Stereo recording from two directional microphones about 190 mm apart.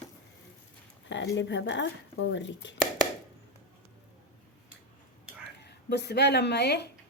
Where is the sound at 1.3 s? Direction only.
70° left (ahead or behind).